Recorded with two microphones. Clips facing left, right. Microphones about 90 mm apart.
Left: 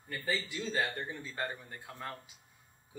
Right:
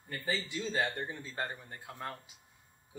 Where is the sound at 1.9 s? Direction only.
15° right (ahead or behind).